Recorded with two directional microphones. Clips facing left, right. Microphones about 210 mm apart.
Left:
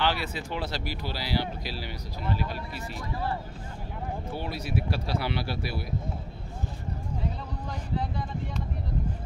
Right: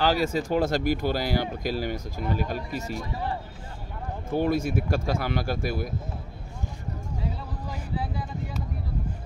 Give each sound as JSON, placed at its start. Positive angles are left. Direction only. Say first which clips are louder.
{"t": 0.0, "sound": "speech", "louder": "right 6 dB", "side_deg": -40}
{"t": 3.0, "sound": "speech", "louder": "right 1 dB", "side_deg": -20}
{"t": 4.3, "sound": "speech", "louder": "right 11 dB", "side_deg": -50}